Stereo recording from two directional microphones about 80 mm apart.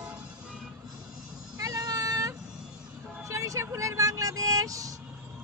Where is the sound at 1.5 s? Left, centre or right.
Right.